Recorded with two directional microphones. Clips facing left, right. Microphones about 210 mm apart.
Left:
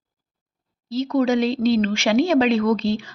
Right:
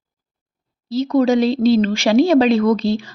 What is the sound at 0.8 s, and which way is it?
Speech, 35° right (ahead or behind).